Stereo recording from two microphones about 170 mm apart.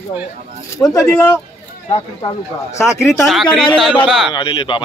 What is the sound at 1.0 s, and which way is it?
Speech, 10° left (ahead or behind).